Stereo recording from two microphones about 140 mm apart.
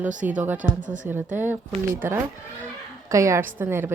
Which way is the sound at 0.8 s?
65° right (ahead or behind).